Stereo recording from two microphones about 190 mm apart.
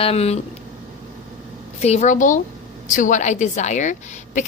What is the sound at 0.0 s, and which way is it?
Speech, 30° left (ahead or behind).